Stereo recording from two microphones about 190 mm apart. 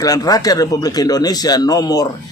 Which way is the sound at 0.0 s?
20° left (ahead or behind).